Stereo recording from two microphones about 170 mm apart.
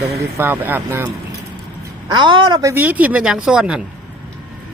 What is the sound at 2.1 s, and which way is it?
Speech, 30° right (ahead or behind).